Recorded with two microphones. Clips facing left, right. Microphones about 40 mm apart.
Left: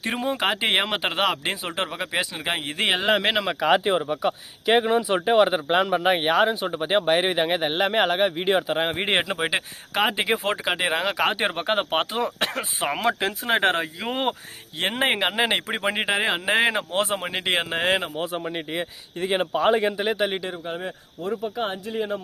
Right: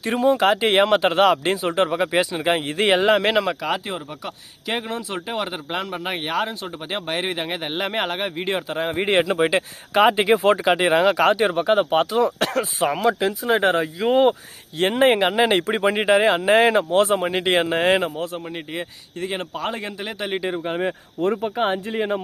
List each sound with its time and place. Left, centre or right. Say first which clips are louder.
0.1 s speech: right 7 dB; centre
3.5 s speech: left 5 dB; left
8.7 s speech: right 3 dB; left
9.2 s speech: right 6 dB; centre
11.3 s speech: right 5 dB; left
12.1 s speech: right 6 dB; left
12.8 s speech: right 3 dB; left
14.8 s speech: right 6 dB; centre
18.2 s speech: even; centre
18.4 s speech: left 1 dB; centre
20.5 s speech: right 7 dB; right
21.2 s speech: right 6 dB; right
21.5 s speech: right 5 dB; right